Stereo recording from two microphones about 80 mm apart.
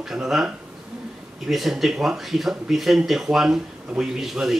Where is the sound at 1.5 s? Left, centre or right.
Centre.